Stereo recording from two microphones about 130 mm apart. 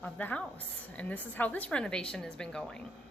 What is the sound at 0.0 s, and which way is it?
A woman's voice, 10° left (ahead or behind).